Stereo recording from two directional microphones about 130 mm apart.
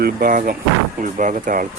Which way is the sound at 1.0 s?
80° right.